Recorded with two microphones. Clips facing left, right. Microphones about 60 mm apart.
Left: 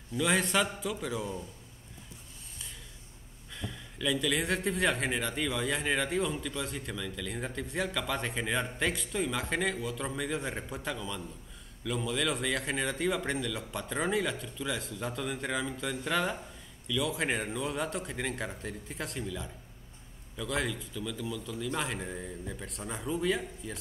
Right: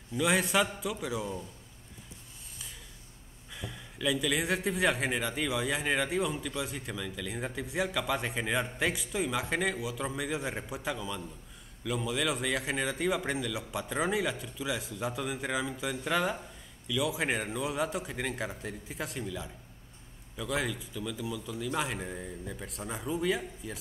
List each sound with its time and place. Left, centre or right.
0.2 s speech: centre
3.5 s speech: centre